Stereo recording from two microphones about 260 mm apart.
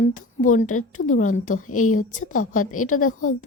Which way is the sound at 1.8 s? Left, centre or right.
Left.